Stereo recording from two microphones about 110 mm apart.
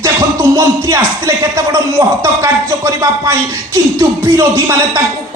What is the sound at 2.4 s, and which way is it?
Speech, 30° right (ahead or behind).